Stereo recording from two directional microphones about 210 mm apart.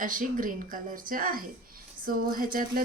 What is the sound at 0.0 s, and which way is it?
A woman's voice, 40° right (ahead or behind).